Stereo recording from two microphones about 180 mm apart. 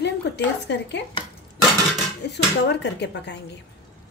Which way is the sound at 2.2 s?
70° left (ahead or behind).